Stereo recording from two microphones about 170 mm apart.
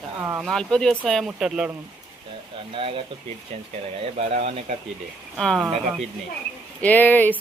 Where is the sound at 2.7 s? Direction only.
30° right (ahead or behind).